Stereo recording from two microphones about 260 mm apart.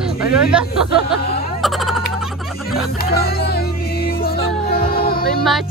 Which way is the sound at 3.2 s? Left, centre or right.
Left.